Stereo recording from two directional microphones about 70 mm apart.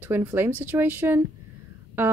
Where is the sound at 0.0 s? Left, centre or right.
Right.